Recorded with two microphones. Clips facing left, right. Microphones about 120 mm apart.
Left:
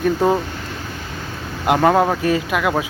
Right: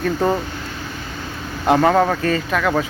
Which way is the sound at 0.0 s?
10° left (ahead or behind).